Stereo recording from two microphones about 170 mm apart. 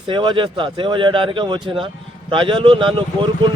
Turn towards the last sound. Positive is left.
turn(degrees=-30)  # may be behind; listen again after turning